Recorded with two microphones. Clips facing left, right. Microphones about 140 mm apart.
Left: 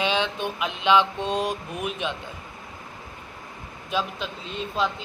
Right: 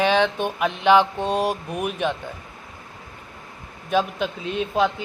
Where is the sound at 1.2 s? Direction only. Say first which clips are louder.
Right 3 dB; 10° right (ahead or behind).